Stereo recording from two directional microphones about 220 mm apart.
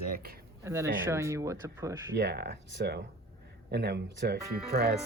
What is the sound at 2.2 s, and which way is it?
Speech, 45° right (ahead or behind).